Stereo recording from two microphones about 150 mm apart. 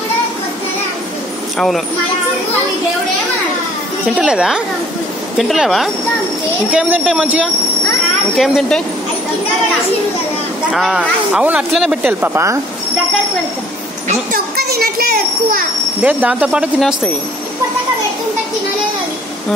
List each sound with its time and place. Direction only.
4.2 s speech: 5° right (ahead or behind)
8.4 s speech: 5° left (ahead or behind)
10.7 s speech: 5° right (ahead or behind)
14.0 s a child's voice: 80° right
16.0 s speech: 10° right (ahead or behind)